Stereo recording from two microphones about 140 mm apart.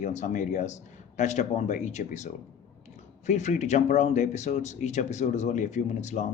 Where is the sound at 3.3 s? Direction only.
55° left (ahead or behind).